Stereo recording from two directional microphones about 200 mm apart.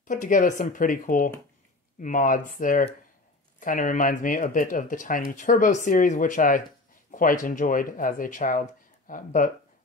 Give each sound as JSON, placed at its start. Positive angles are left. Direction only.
{"t": 0.1, "sound": "speech", "side_deg": 40}
{"t": 7.1, "sound": "a sound", "side_deg": 45}
{"t": 7.4, "sound": "speech", "side_deg": 40}